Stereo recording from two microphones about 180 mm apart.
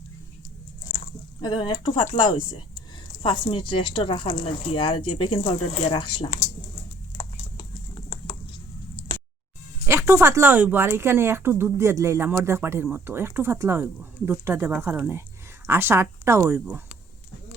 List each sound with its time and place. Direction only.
1.4 s speech: 25° left (ahead or behind)
9.8 s speech: 15° right (ahead or behind)